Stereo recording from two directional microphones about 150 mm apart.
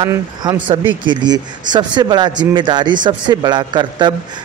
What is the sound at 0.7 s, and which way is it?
A man's voice, 30° right (ahead or behind).